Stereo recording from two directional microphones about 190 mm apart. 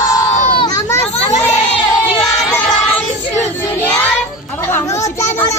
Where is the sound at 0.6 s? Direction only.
20° left (ahead or behind).